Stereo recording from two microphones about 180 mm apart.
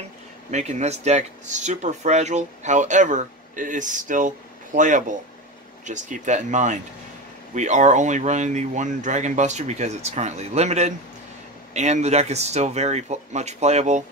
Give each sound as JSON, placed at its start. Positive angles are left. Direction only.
{"t": 0.5, "sound": "speech", "side_deg": -40}